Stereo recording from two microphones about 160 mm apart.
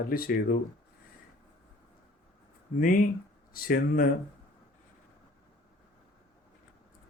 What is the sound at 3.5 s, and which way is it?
Speech, 65° left (ahead or behind).